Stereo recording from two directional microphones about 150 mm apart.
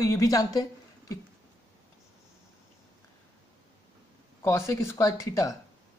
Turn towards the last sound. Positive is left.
turn(degrees=20)  # may be behind; listen again after turning